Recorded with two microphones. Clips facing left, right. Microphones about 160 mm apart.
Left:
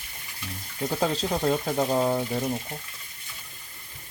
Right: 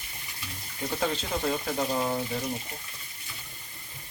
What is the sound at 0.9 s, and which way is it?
Speech, 35° left (ahead or behind).